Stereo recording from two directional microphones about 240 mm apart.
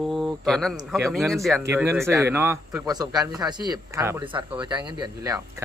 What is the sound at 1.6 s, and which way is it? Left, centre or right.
A man's voice, centre.